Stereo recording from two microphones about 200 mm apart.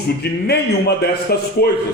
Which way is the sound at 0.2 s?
55° left (ahead or behind).